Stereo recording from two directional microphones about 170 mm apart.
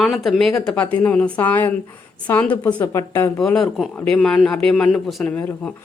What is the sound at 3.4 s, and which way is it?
Speech, 5° left (ahead or behind).